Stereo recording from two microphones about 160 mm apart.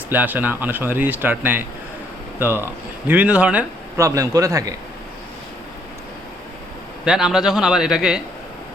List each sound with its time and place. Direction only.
0.1 s speech: 10° right (ahead or behind)
3.9 s a man's voice: 20° right (ahead or behind)
7.0 s a man's voice: 5° right (ahead or behind)